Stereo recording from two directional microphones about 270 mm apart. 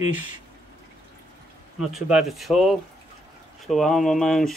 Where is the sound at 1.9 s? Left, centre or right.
Centre.